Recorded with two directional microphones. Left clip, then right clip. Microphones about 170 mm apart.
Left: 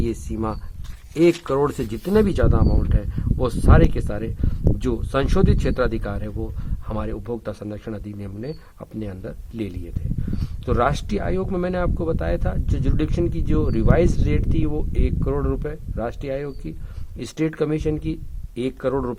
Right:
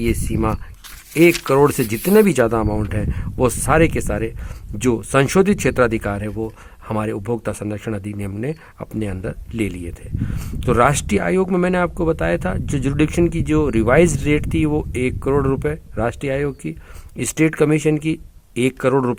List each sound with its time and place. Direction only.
0.0 s speech: 25° right (ahead or behind)